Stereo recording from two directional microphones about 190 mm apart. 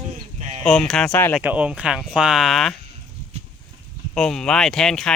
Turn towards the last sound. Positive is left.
turn(degrees=5)  # may be behind; listen again after turning